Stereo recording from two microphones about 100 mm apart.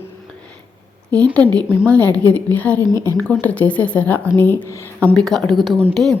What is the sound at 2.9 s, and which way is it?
Speech, 30° left (ahead or behind).